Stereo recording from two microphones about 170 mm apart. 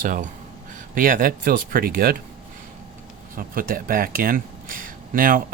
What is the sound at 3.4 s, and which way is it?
Speech, 55° right (ahead or behind).